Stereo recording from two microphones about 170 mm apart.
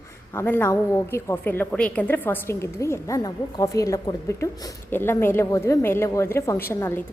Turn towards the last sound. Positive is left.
turn(degrees=15)  # may be behind; listen again after turning